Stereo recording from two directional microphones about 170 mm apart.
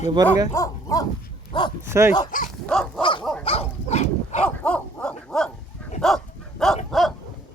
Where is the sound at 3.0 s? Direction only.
30° left (ahead or behind).